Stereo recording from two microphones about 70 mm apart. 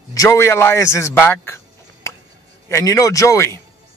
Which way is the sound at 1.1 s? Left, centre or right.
Left.